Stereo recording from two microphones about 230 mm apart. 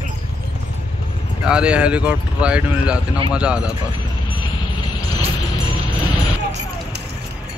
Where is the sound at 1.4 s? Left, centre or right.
Centre.